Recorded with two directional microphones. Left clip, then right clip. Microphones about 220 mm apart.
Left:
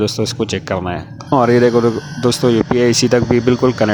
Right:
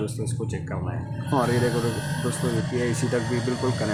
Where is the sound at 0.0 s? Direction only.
35° left (ahead or behind).